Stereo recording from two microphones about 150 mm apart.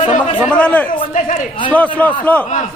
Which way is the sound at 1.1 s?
55° left (ahead or behind).